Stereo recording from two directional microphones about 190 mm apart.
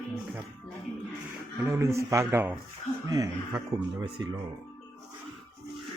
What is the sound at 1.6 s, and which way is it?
Speech, 15° right (ahead or behind).